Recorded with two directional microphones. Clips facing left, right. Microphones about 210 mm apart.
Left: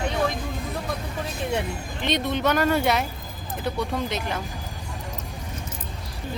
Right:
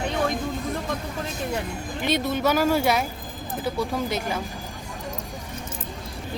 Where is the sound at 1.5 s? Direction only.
5° right (ahead or behind).